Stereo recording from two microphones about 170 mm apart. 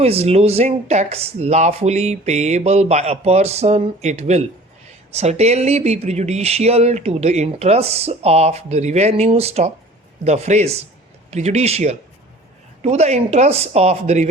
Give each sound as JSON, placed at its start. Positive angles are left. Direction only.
{"t": 0.0, "sound": "speech", "side_deg": -35}